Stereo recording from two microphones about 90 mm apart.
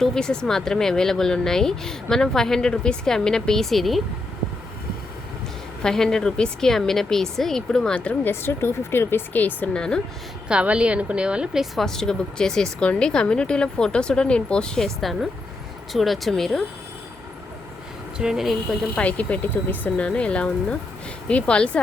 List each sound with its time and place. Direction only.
0.0 s speech: 5° left (ahead or behind)
5.8 s speech: 5° left (ahead or behind)
8.3 s speech: 25° left (ahead or behind)
10.5 s speech: 10° right (ahead or behind)
18.2 s speech: 5° right (ahead or behind)
18.9 s speech: 15° left (ahead or behind)